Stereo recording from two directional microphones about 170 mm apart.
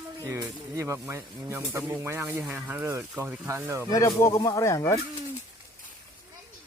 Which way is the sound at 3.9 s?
20° left (ahead or behind).